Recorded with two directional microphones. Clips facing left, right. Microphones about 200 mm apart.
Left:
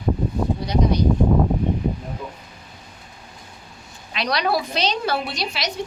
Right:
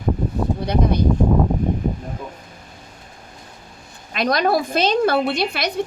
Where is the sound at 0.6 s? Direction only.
55° right (ahead or behind).